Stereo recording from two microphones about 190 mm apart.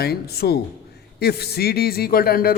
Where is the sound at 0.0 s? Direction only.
55° left (ahead or behind).